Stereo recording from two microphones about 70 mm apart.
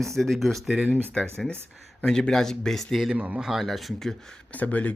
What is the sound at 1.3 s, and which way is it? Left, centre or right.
Speech, centre.